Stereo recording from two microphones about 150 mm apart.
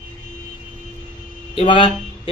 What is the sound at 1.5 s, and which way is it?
Speech, 35° left (ahead or behind).